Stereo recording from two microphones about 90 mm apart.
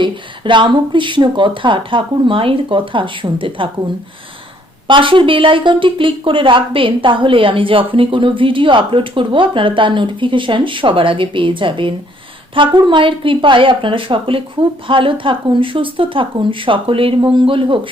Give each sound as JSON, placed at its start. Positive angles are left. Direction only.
{"t": 0.0, "sound": "speech", "side_deg": -60}
{"t": 4.9, "sound": "a woman's voice", "side_deg": -70}